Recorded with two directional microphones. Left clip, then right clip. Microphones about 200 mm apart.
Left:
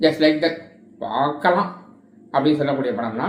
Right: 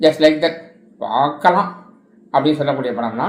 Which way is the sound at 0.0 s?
20° right (ahead or behind).